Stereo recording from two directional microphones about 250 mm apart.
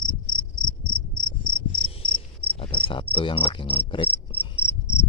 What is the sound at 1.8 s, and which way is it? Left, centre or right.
Insect, left.